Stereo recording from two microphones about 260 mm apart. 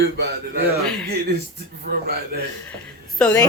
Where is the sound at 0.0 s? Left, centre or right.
Right.